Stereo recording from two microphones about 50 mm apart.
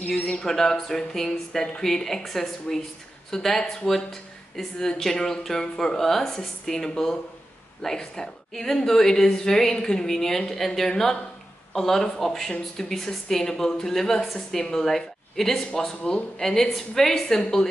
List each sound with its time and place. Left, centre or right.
0.0 s speech: left
0.4 s a woman's voice: centre